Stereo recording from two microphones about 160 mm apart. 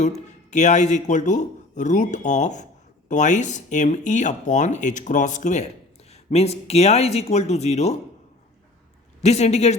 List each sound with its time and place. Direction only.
0.3 s a man's voice: 45° left (ahead or behind)
9.2 s speech: 45° left (ahead or behind)